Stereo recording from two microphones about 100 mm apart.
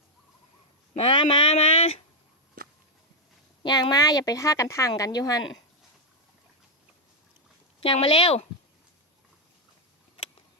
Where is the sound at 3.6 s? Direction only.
45° left (ahead or behind).